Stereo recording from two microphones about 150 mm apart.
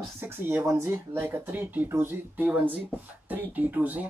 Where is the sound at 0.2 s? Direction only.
10° right (ahead or behind).